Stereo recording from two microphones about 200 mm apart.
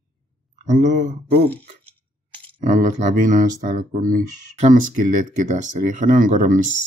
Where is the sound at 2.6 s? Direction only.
40° right (ahead or behind).